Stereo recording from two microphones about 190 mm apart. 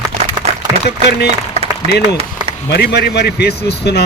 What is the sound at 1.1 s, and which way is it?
Speech, 60° left (ahead or behind).